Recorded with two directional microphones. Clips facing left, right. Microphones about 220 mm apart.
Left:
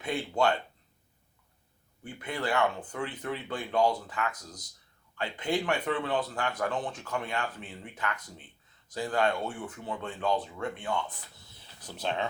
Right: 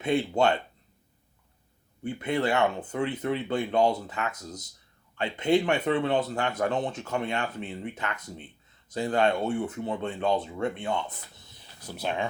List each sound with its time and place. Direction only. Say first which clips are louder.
0.0 s speech: right 4 dB; 25° right (ahead or behind)
2.0 s speech: right 6 dB; 25° right (ahead or behind)